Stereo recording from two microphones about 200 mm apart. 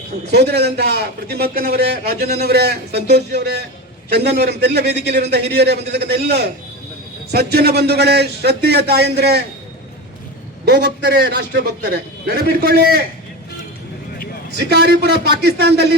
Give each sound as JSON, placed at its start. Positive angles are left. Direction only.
{"t": 0.3, "sound": "a man's voice", "side_deg": -55}
{"t": 10.7, "sound": "a man's voice", "side_deg": -55}
{"t": 14.7, "sound": "a man's voice", "side_deg": -55}